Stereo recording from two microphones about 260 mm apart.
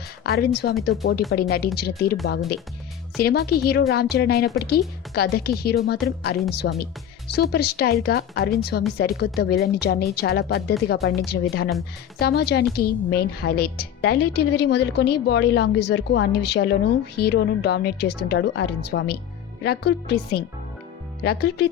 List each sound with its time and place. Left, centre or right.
0.3 s a woman's voice: left
3.2 s a woman's voice: left